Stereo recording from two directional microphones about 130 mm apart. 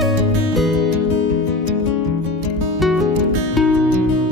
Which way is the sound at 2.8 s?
Centre (ahead or behind).